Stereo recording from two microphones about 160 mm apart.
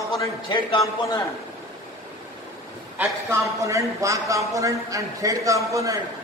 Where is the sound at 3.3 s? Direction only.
20° right (ahead or behind).